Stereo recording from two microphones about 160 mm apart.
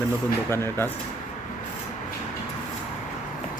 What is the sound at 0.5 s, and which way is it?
Speech, 15° left (ahead or behind).